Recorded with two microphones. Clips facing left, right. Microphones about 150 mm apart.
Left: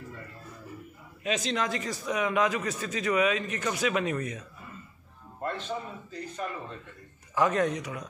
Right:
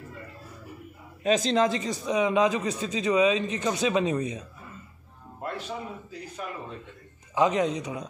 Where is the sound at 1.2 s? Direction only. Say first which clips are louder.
Right 7 dB; 35° right (ahead or behind); by 4.5 s 20° right (ahead or behind).